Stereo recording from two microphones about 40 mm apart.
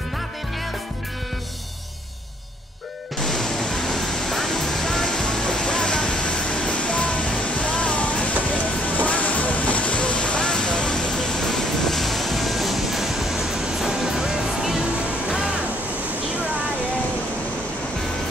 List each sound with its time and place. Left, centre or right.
3.2 s music: centre